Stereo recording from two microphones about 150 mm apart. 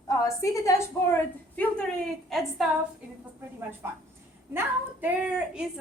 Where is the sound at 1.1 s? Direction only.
10° left (ahead or behind).